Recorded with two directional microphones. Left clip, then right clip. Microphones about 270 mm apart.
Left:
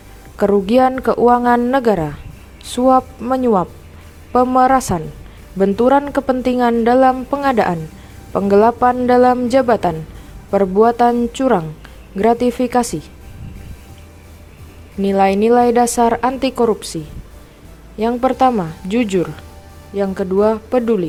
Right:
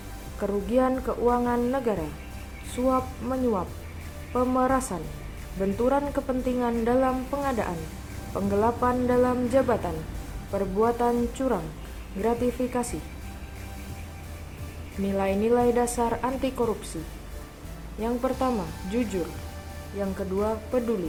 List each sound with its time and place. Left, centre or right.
0.3 s a woman's voice: left
15.0 s a woman's voice: left
18.0 s a woman's voice: left